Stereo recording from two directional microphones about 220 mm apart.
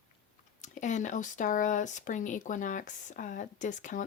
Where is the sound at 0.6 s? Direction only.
35° left (ahead or behind).